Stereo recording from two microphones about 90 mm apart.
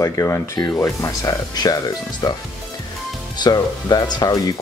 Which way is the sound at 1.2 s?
45° left (ahead or behind).